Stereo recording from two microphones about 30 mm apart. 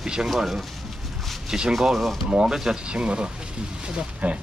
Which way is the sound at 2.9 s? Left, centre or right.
Right.